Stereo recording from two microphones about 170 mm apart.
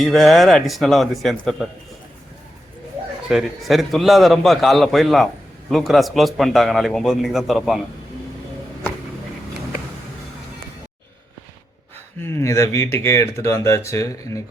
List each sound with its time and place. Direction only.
0.0 s a man's voice: centre (ahead or behind)
3.2 s a man's voice: centre (ahead or behind)
12.2 s speech: 15° left (ahead or behind)